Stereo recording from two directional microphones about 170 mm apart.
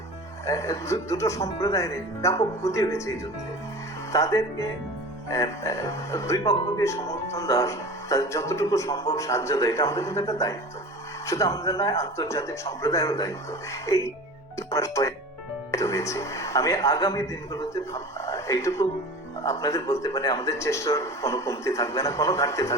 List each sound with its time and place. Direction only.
0.4 s speech: 20° left (ahead or behind)
4.1 s a man's voice: 20° left (ahead or behind)